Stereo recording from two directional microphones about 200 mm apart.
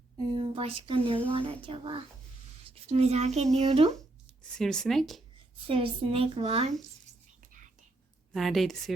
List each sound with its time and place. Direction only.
0.3 s speech: 30° right (ahead or behind)
4.5 s speech: 5° left (ahead or behind)
5.5 s speech: 25° right (ahead or behind)
8.3 s a woman's voice: centre (ahead or behind)